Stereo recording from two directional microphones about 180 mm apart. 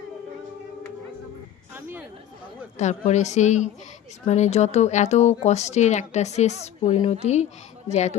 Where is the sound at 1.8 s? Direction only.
10° right (ahead or behind).